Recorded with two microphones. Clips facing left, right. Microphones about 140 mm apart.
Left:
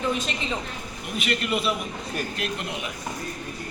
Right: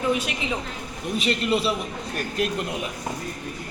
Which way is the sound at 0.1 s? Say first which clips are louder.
Right 3 dB; 10° right (ahead or behind).